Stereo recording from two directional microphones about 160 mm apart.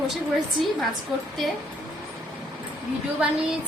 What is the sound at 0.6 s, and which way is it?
Speech, centre (ahead or behind).